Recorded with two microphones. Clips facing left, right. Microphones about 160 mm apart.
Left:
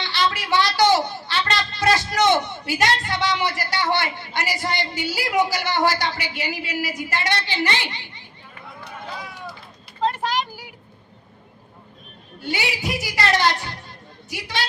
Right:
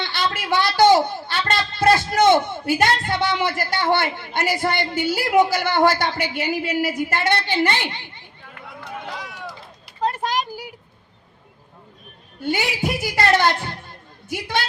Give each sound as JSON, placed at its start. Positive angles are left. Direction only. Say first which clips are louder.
{"t": 0.0, "sound": "a child's voice", "louder": "left 1 dB", "side_deg": -50}
{"t": 9.1, "sound": "run", "louder": "right 1 dB", "side_deg": -85}
{"t": 12.4, "sound": "a child's voice", "louder": "right 4 dB", "side_deg": -50}